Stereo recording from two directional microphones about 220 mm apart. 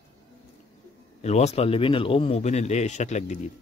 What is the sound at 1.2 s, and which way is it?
Speech, 30° left (ahead or behind).